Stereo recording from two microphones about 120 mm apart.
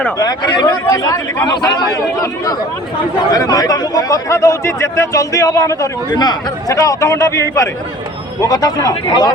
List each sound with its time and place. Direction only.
0.2 s speech: 35° left (ahead or behind)